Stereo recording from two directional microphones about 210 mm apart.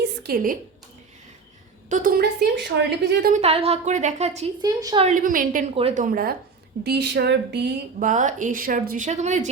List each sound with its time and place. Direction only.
0.0 s a sound: 50° right (ahead or behind)
1.9 s a woman's voice: 40° right (ahead or behind)
3.3 s speech: 30° right (ahead or behind)
4.6 s a woman's voice: 20° right (ahead or behind)
5.0 s speech: 40° right (ahead or behind)